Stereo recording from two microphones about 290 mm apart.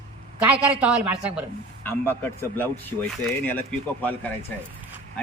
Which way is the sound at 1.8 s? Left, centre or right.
Centre.